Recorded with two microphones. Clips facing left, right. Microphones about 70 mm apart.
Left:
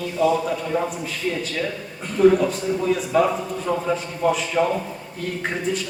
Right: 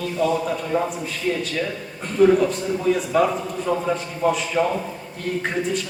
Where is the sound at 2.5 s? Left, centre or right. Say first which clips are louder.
Even; centre.